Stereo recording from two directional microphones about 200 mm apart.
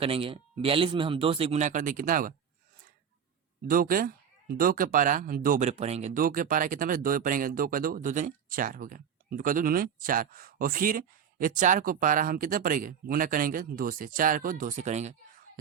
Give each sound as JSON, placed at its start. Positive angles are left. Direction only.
{"t": 0.0, "sound": "a man's voice", "side_deg": -25}
{"t": 3.7, "sound": "speech", "side_deg": -45}